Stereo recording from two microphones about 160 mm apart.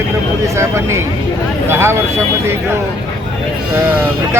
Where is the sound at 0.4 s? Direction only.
15° right (ahead or behind).